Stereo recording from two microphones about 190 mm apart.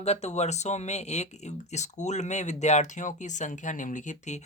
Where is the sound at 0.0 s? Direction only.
35° left (ahead or behind).